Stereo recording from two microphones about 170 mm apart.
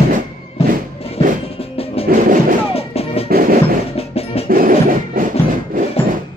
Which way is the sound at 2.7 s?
35° left (ahead or behind).